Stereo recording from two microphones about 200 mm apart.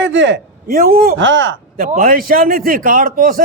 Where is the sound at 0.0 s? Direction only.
65° right (ahead or behind); by 1.1 s 50° right (ahead or behind).